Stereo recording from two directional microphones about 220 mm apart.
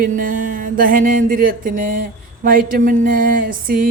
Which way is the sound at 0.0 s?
35° right (ahead or behind).